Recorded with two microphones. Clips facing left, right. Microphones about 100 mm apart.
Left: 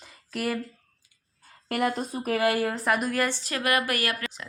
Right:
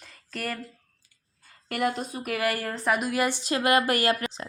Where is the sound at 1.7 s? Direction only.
40° left (ahead or behind).